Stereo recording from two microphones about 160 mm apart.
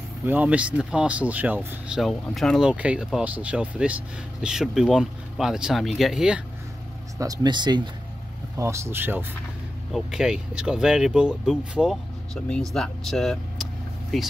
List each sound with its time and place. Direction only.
0.2 s speech: 10° right (ahead or behind)
2.3 s speech: centre (ahead or behind)
7.2 s speech: 25° right (ahead or behind)
8.5 s speech: 15° right (ahead or behind); by 14.3 s centre (ahead or behind)